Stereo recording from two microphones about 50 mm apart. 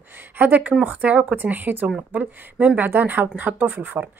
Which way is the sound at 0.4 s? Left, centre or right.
Right.